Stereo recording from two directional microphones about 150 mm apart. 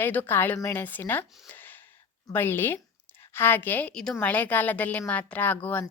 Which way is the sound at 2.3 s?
15° left (ahead or behind).